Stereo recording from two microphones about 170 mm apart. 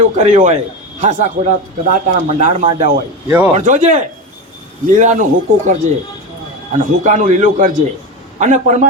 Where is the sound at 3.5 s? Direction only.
45° right (ahead or behind).